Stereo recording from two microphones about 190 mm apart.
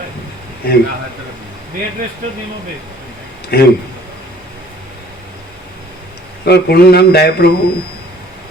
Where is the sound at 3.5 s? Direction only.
55° left (ahead or behind).